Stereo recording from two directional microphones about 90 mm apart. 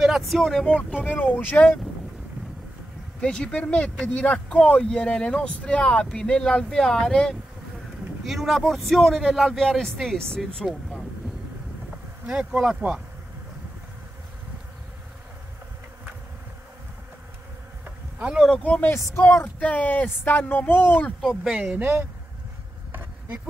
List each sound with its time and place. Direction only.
0.0 s speech: 5° right (ahead or behind)
1.0 s speech: 20° left (ahead or behind)
3.2 s speech: 10° left (ahead or behind)
12.3 s speech: 10° right (ahead or behind)
17.8 s insect: 10° right (ahead or behind)
18.6 s speech: 20° left (ahead or behind)
18.9 s speech: 35° left (ahead or behind)
19.2 s speech: 25° left (ahead or behind)
21.2 s speech: 5° left (ahead or behind)
21.5 s speech: 15° right (ahead or behind)
22.9 s insect: 20° right (ahead or behind)